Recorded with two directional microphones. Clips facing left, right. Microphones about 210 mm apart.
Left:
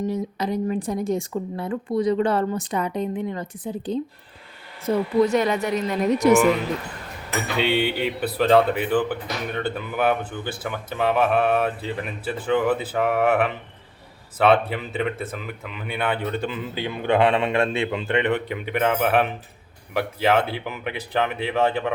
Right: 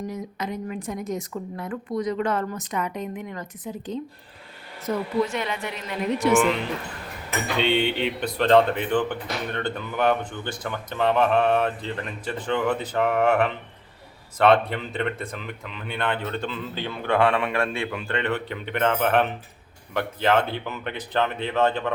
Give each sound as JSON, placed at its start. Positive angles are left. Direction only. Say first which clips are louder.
{"t": 0.1, "sound": "speech", "louder": "left 6 dB", "side_deg": 35}
{"t": 7.6, "sound": "speech", "louder": "left 1 dB", "side_deg": 5}